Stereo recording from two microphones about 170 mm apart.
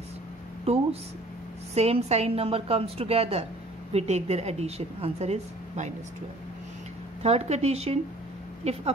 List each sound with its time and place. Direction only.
0.7 s a woman's voice: 35° right (ahead or behind)
7.2 s a woman's voice: 40° right (ahead or behind)